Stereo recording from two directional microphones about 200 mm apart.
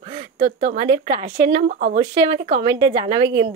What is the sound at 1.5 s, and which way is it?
Speech, 40° right (ahead or behind).